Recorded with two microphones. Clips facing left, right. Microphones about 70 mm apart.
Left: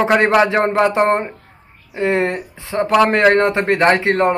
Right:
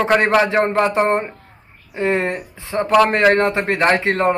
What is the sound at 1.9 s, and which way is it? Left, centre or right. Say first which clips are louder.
Speech: left 2 dB; centre.